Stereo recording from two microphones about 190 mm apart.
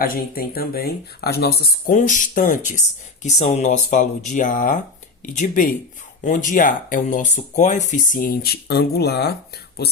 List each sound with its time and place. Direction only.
0.0 s speech: 50° left (ahead or behind)
2.0 s speech: 40° left (ahead or behind)